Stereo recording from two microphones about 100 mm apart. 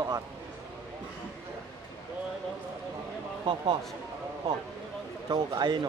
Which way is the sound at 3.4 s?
55° right (ahead or behind).